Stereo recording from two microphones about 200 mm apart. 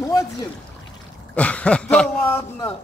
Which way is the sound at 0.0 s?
15° left (ahead or behind).